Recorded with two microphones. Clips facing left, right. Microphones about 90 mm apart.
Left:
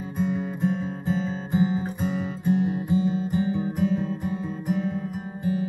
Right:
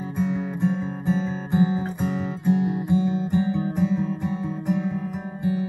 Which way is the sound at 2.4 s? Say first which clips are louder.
Right 1 dB; 20° right (ahead or behind).